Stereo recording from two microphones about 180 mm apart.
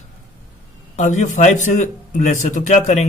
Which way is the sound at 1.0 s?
40° left (ahead or behind).